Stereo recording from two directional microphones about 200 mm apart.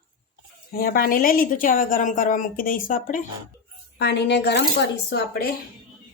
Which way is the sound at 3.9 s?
55° left (ahead or behind).